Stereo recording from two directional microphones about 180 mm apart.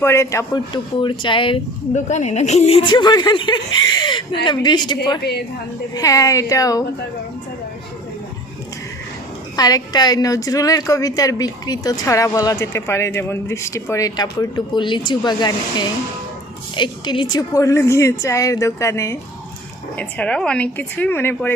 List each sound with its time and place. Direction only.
0.0 s a woman's voice: 15° left (ahead or behind)
0.7 s a woman's voice: 30° left (ahead or behind)
9.6 s a woman's voice: 20° left (ahead or behind)